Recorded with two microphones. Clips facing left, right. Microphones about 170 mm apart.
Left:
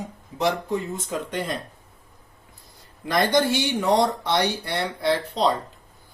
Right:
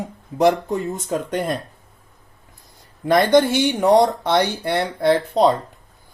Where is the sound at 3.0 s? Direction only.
55° right (ahead or behind).